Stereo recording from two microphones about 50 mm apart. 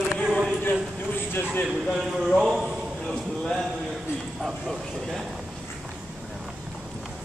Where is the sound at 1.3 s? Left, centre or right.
Left.